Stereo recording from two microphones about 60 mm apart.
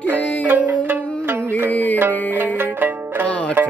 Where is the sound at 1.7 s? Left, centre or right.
Left.